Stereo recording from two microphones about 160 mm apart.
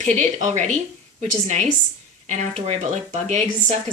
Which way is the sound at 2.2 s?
45° right (ahead or behind).